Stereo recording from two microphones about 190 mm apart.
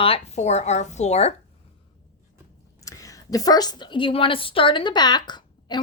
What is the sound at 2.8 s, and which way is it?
A woman's voice, 15° left (ahead or behind).